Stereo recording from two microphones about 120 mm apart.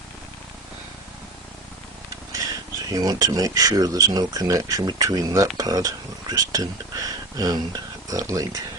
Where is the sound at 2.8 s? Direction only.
30° right (ahead or behind).